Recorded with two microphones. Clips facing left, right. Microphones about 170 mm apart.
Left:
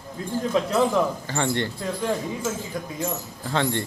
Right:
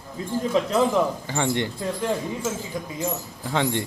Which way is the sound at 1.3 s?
15° right (ahead or behind).